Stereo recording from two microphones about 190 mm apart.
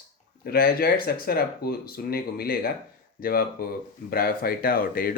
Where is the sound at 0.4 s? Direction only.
55° left (ahead or behind).